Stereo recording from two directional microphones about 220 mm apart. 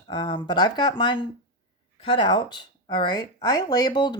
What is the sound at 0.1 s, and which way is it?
Speech, 20° left (ahead or behind).